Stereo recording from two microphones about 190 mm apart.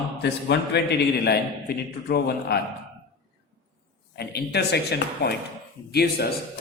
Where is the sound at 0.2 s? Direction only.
60° left (ahead or behind).